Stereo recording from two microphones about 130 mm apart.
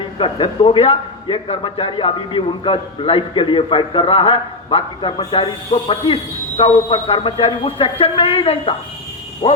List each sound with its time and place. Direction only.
0.2 s a man's voice: 45° left (ahead or behind)